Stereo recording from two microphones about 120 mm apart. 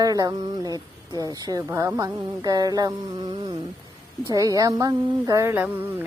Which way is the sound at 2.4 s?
30° right (ahead or behind).